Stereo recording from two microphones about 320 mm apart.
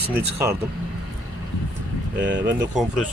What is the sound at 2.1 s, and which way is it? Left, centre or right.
Speech, right.